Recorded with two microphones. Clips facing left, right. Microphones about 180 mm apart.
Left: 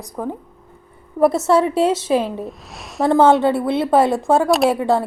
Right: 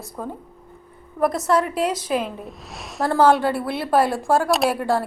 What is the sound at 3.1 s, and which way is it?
A woman's voice, 25° left (ahead or behind).